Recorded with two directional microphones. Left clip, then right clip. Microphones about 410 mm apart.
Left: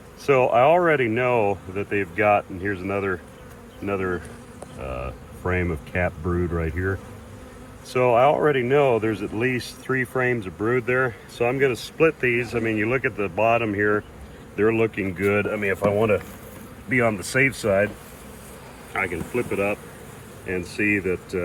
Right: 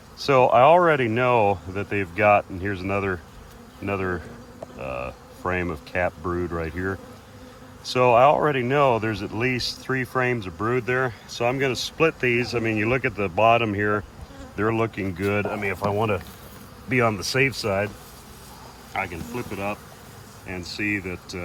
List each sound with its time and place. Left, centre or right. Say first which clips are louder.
0.3 s speech: right 1 dB; centre
7.9 s speech: right 1 dB; centre
18.9 s speech: left 2 dB; centre
20.5 s speech: left 4 dB; centre